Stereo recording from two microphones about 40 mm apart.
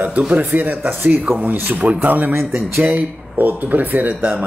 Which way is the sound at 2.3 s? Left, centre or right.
Right.